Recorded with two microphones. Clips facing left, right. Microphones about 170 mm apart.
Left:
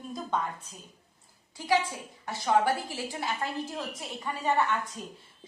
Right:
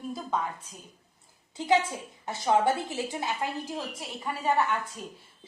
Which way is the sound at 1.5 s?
20° right (ahead or behind).